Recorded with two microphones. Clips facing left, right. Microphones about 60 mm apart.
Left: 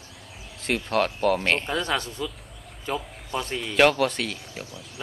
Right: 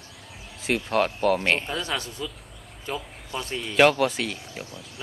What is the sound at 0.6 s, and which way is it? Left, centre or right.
Speech, centre.